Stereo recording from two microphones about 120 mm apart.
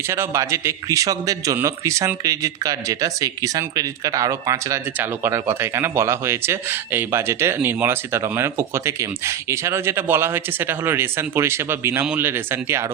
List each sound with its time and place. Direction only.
0.1 s speech: 25° right (ahead or behind)